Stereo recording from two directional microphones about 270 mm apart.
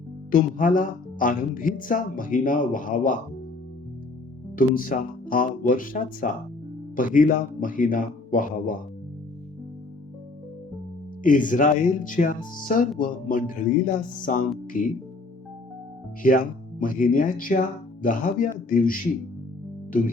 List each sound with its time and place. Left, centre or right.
0.3 s speech: left
4.5 s speech: left
11.2 s speech: left
16.2 s speech: left